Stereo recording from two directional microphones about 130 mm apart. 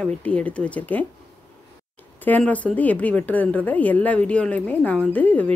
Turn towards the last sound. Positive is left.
turn(degrees=10)  # may be behind; listen again after turning